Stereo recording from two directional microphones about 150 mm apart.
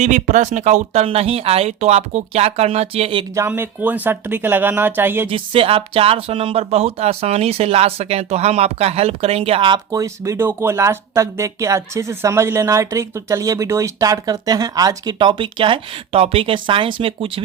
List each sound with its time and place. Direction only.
0.0 s speech: 55° right (ahead or behind); by 3.2 s 40° right (ahead or behind)
3.3 s speech: 15° right (ahead or behind)
5.3 s speech: 40° right (ahead or behind)